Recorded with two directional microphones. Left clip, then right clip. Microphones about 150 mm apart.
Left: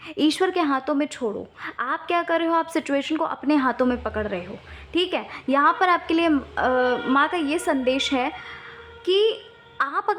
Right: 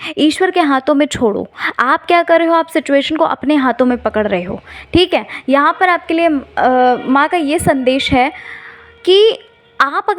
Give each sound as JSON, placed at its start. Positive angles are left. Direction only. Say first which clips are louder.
{"t": 0.0, "sound": "a woman's voice", "louder": "right 9 dB", "side_deg": -40}
{"t": 0.3, "sound": "a woman's voice", "louder": "right 9 dB", "side_deg": -25}
{"t": 6.5, "sound": "a woman's voice", "louder": "right 10 dB", "side_deg": -35}